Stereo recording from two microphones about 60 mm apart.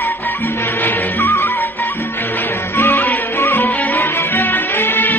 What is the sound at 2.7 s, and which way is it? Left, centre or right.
Music, left.